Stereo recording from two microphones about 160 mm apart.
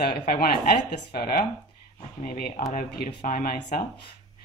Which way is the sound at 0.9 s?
70° left (ahead or behind).